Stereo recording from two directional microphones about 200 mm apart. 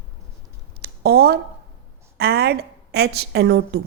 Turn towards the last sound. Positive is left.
turn(degrees=-60)  # may be behind; listen again after turning